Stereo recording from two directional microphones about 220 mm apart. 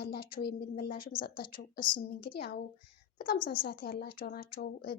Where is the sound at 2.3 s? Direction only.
45° left (ahead or behind).